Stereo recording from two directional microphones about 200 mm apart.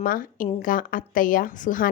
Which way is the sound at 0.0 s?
45° left (ahead or behind).